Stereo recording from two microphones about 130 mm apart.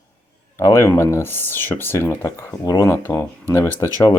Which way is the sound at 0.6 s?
20° left (ahead or behind).